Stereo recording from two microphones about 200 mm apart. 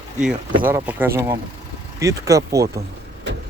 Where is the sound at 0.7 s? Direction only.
10° right (ahead or behind).